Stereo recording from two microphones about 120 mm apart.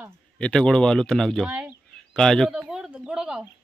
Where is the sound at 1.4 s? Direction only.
10° right (ahead or behind).